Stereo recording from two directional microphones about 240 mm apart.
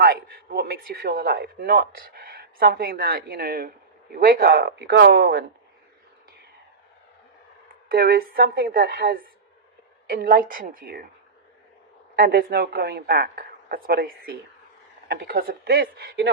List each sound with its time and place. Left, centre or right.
0.0 s speech: right
7.9 s speech: right
12.1 s speech: right